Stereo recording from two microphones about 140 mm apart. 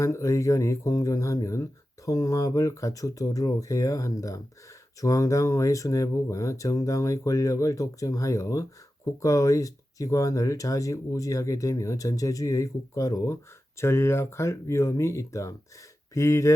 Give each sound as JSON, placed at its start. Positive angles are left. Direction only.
{"t": 0.0, "sound": "speech", "side_deg": 20}